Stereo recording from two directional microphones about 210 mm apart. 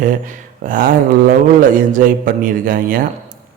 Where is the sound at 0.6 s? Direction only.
40° right (ahead or behind).